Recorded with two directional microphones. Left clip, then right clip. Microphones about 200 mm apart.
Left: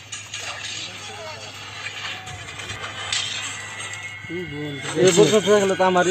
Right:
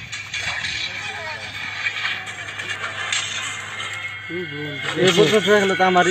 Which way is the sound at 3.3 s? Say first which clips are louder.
Right 2 dB; centre (ahead or behind).